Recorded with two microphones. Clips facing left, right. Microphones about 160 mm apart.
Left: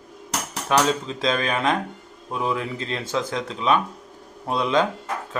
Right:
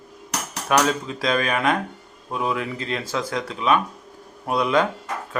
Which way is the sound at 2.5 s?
30° left (ahead or behind).